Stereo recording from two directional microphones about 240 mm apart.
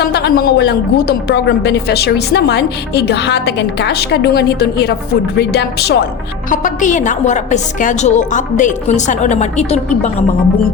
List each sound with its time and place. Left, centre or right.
0.0 s a woman's voice: left